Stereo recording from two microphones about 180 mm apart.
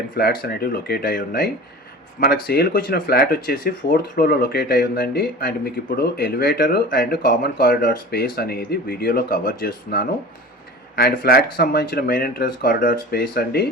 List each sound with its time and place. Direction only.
0.2 s speech: 60° left (ahead or behind)